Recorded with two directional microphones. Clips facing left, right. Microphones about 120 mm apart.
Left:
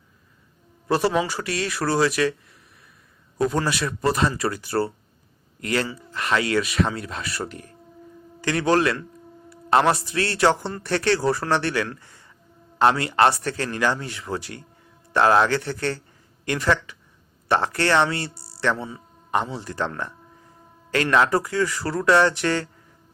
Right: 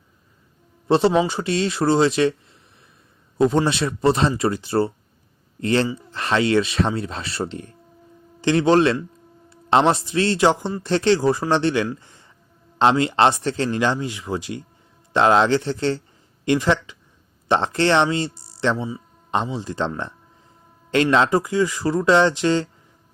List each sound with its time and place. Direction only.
0.9 s speech: 25° right (ahead or behind)